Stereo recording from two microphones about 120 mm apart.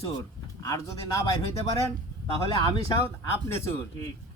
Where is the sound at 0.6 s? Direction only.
30° left (ahead or behind).